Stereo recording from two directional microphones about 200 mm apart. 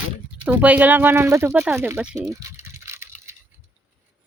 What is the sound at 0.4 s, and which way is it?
Speech, 10° right (ahead or behind).